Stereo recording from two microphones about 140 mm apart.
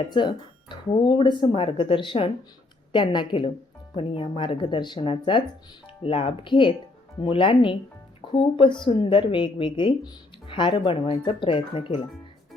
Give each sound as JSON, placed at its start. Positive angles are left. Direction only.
{"t": 0.1, "sound": "speech", "side_deg": 35}